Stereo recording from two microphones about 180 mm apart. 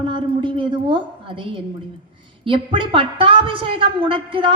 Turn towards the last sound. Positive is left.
turn(degrees=-30)  # may be behind; listen again after turning